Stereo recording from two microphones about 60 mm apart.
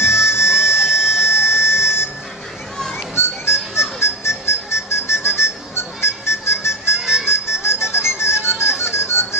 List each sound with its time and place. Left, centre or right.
0.0 s a sound: left
3.2 s music: left
7.0 s music: centre
7.2 s music: left